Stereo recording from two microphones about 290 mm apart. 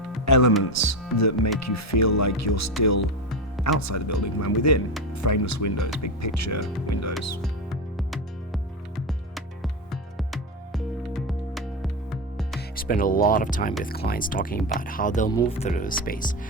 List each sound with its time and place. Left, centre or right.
0.3 s speech: left
0.6 s speech: left
7.4 s music: centre
12.5 s speech: left
15.3 s speech: centre